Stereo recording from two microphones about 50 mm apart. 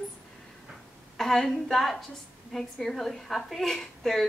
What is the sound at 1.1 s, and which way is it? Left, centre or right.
Speech, centre.